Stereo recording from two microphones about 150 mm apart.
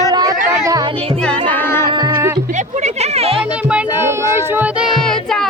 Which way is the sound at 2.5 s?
50° right (ahead or behind).